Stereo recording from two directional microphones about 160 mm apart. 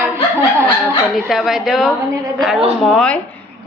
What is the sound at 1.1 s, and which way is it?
Speech, centre (ahead or behind).